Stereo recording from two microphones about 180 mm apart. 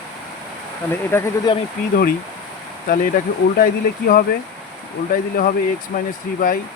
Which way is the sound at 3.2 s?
45° left (ahead or behind).